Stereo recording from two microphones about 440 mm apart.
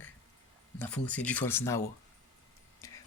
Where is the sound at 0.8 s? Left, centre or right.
Centre.